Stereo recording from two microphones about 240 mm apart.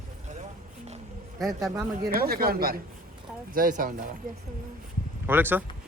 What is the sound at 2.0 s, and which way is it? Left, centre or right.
Speech, right.